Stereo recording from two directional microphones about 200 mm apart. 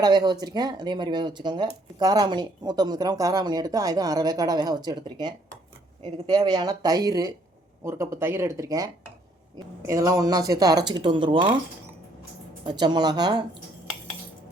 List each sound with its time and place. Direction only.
0.0 s speech: 20° right (ahead or behind)
12.6 s speech: 20° right (ahead or behind)